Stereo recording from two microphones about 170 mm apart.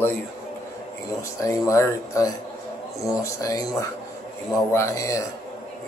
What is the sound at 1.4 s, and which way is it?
Speech, 20° left (ahead or behind).